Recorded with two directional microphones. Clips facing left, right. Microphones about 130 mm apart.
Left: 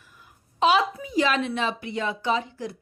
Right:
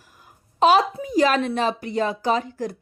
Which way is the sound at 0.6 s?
40° right (ahead or behind).